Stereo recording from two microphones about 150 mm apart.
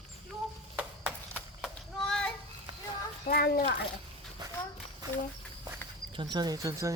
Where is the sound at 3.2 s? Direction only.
75° left (ahead or behind).